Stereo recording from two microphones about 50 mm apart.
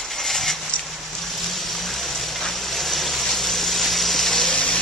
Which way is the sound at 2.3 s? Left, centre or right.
Centre.